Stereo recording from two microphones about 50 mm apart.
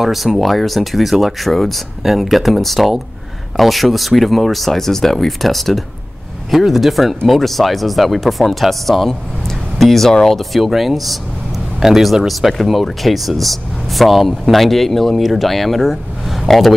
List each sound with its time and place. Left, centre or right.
0.0 s speech: centre